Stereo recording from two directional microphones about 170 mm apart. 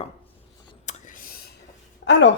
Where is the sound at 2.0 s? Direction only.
75° left (ahead or behind).